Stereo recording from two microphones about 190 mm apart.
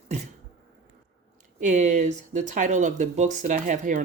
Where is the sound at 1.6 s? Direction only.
40° right (ahead or behind).